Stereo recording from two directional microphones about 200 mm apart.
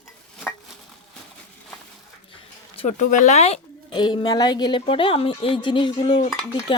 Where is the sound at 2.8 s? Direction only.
40° left (ahead or behind).